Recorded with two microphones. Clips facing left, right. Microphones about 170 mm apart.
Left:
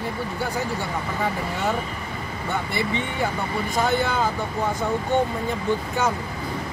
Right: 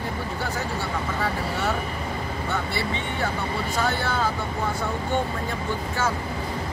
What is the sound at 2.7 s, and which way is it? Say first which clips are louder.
Speech: left 2 dB; 15° left (ahead or behind).